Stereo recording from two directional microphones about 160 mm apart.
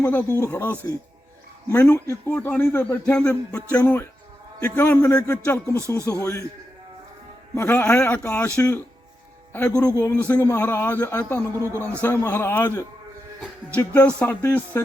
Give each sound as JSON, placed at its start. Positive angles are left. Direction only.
{"t": 0.0, "sound": "a man's voice", "side_deg": 10}
{"t": 1.7, "sound": "a man's voice", "side_deg": 10}
{"t": 7.5, "sound": "a man's voice", "side_deg": 15}
{"t": 11.5, "sound": "speech", "side_deg": -20}
{"t": 12.0, "sound": "a man's voice", "side_deg": 15}